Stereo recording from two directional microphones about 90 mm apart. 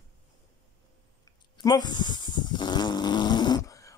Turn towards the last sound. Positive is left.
turn(degrees=55)  # may be behind; listen again after turning